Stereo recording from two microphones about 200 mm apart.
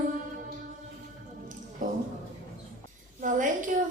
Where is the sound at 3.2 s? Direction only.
40° right (ahead or behind).